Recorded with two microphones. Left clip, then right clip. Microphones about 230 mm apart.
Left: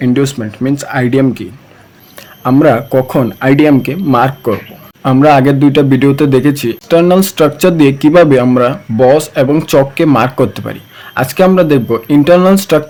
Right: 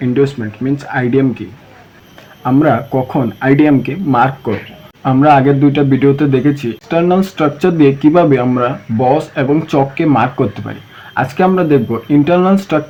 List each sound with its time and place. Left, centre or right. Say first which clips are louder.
0.0 s speech: left 1 dB; left
2.4 s a man's voice: left 3 dB; left